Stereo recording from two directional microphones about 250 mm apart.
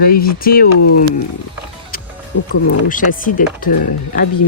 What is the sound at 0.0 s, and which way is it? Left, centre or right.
Speech, left.